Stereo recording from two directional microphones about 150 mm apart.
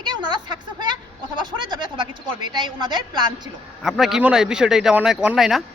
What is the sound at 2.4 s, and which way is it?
Speech, 30° right (ahead or behind).